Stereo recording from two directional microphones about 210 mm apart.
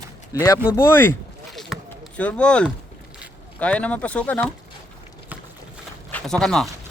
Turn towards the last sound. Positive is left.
turn(degrees=0)  # may be behind; listen again after turning